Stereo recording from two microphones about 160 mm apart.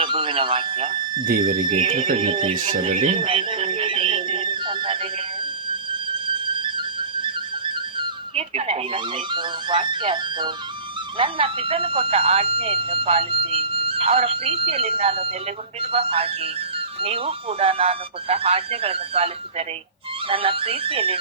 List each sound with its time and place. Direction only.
0.0 s speech: 35° right (ahead or behind)
1.2 s speech: 60° right (ahead or behind)
1.7 s speech: 35° right (ahead or behind)
3.0 s a sound: 35° right (ahead or behind)
5.9 s music: 30° right (ahead or behind)
11.2 s speech: 35° right (ahead or behind)